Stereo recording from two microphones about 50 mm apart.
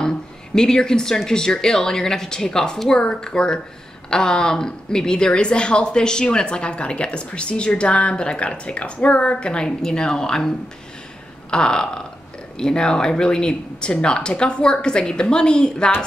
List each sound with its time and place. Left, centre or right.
0.6 s speech: centre
11.5 s speech: centre